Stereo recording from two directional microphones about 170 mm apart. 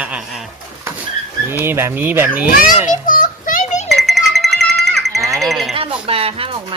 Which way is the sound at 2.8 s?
50° left (ahead or behind).